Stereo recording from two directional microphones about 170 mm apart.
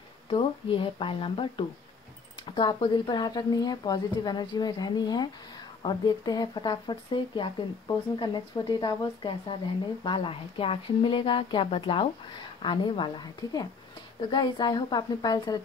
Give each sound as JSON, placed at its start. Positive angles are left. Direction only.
{"t": 0.3, "sound": "speech", "side_deg": 30}